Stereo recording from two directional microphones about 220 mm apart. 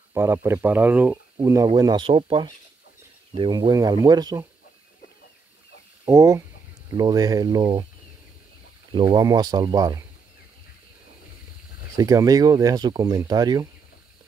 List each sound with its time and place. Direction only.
0.1 s speech: 10° right (ahead or behind)
6.0 s speech: 15° right (ahead or behind)
8.9 s speech: 15° right (ahead or behind)
12.0 s speech: 15° right (ahead or behind)